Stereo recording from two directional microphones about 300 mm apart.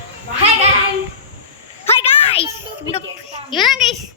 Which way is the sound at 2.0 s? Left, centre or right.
Centre.